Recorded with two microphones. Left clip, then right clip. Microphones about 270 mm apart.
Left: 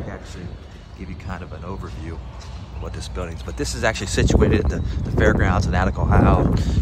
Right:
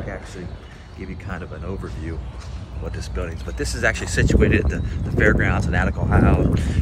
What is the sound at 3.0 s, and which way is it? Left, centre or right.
Speech, centre.